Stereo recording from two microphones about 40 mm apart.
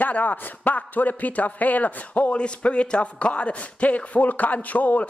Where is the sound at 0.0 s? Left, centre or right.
Left.